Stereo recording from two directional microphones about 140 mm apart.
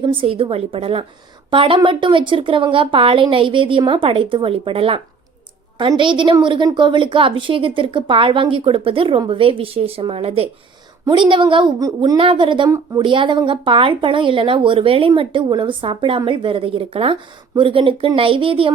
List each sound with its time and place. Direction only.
0.0 s speech: 40° right (ahead or behind)
6.0 s speech: 35° right (ahead or behind)